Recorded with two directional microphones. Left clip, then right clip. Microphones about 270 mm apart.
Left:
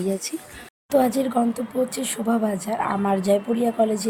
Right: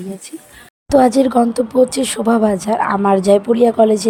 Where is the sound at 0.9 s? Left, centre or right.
Right.